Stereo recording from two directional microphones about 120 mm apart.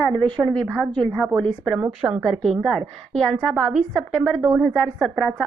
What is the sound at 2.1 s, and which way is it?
A woman's voice, 5° right (ahead or behind).